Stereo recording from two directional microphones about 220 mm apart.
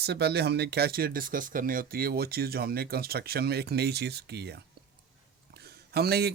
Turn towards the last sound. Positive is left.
turn(degrees=-45)  # may be behind; listen again after turning